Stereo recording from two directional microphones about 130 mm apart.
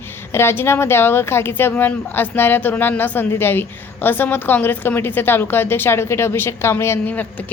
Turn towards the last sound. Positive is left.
turn(degrees=15)  # may be behind; listen again after turning